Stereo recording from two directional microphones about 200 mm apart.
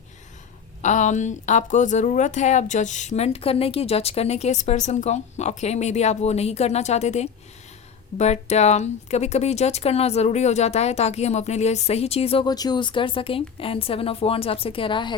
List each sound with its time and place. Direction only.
0.8 s speech: 35° left (ahead or behind)